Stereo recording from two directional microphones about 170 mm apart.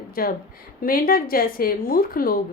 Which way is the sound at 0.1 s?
60° left (ahead or behind).